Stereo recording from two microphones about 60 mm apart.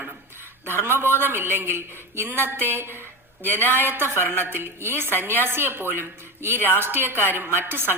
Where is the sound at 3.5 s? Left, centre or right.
Left.